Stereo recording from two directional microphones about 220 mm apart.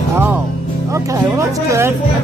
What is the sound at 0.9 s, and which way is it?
Speech, 15° right (ahead or behind).